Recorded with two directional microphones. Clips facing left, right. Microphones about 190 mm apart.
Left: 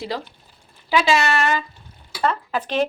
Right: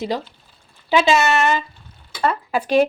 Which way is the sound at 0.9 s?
20° right (ahead or behind).